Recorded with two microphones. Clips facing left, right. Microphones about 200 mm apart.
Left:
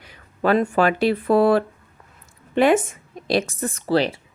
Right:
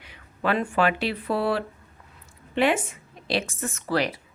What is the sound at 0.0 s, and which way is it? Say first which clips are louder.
Speech: left 6 dB; 40° left (ahead or behind).